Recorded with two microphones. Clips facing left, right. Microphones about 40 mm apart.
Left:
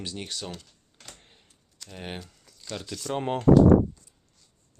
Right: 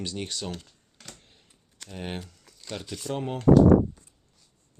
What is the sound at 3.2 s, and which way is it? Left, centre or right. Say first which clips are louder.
Speech: left 4 dB; left.